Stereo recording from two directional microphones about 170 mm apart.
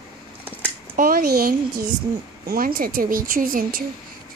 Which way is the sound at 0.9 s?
60° right (ahead or behind).